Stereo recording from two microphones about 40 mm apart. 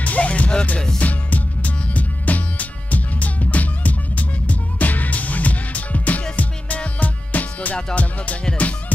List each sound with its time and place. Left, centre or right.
0.0 s music: left
0.9 s music: left